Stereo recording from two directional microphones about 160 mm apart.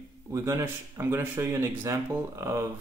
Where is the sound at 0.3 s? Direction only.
20° right (ahead or behind).